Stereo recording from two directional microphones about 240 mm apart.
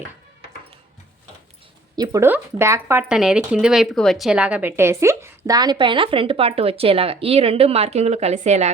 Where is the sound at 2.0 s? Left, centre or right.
Centre.